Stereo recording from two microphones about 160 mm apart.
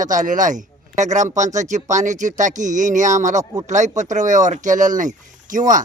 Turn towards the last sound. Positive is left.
turn(degrees=-55)  # may be behind; listen again after turning